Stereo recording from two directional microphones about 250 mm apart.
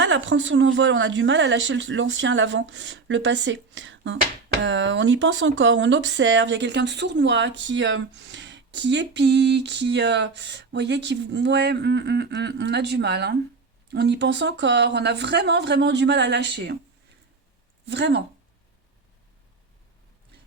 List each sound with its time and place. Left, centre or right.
0.0 s speech: right
17.8 s speech: right